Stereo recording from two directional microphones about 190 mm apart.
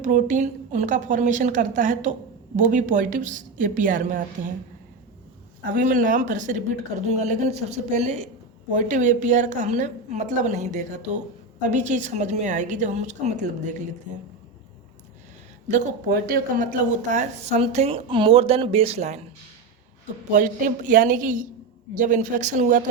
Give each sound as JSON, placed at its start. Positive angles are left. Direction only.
{"t": 0.0, "sound": "a woman's voice", "side_deg": -40}
{"t": 5.7, "sound": "speech", "side_deg": -45}
{"t": 15.7, "sound": "speech", "side_deg": -50}
{"t": 20.3, "sound": "a woman's voice", "side_deg": -45}